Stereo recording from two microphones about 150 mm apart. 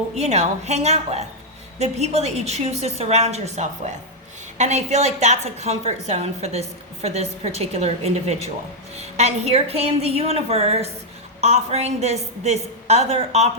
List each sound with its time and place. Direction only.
0.2 s a woman's voice: 45° right (ahead or behind)